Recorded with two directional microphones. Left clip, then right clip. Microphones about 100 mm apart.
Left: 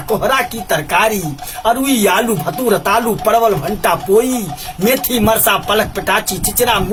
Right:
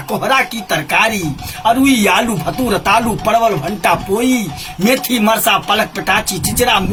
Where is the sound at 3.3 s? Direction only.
50° left (ahead or behind).